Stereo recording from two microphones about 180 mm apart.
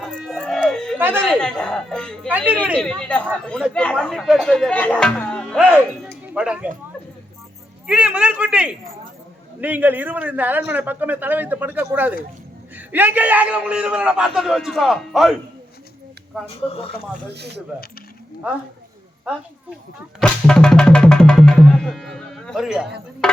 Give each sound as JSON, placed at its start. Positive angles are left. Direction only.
{"t": 0.0, "sound": "dog", "side_deg": 0}
{"t": 0.9, "sound": "speech", "side_deg": -10}
{"t": 1.3, "sound": "speech", "side_deg": 5}
{"t": 2.3, "sound": "a man's voice", "side_deg": -10}
{"t": 2.8, "sound": "speech", "side_deg": 5}
{"t": 7.9, "sound": "a man's voice", "side_deg": -5}
{"t": 16.6, "sound": "speech", "side_deg": 30}
{"t": 17.3, "sound": "speech", "side_deg": -65}
{"t": 19.3, "sound": "speech", "side_deg": -5}
{"t": 20.1, "sound": "speech", "side_deg": 5}
{"t": 23.2, "sound": "a sound", "side_deg": 5}